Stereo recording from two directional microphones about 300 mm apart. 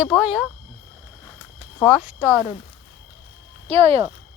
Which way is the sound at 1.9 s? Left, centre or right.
Centre.